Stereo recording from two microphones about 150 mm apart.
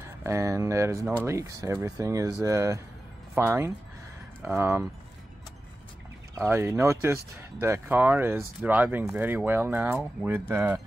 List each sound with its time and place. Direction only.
0.2 s speech: 20° right (ahead or behind)
6.3 s speech: 15° right (ahead or behind)